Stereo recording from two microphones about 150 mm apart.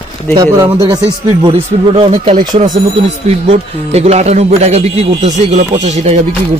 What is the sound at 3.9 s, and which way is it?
Speech, 45° right (ahead or behind).